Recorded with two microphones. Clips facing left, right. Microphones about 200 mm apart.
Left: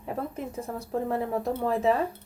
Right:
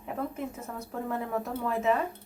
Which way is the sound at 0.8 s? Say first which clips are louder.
Left 5 dB; 30° left (ahead or behind).